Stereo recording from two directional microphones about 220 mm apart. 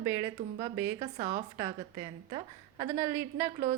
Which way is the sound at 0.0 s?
15° right (ahead or behind).